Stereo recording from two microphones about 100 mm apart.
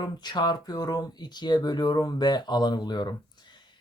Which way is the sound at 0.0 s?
45° left (ahead or behind).